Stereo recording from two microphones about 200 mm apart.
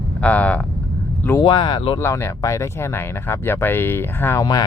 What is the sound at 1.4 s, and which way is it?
Speech, 25° left (ahead or behind).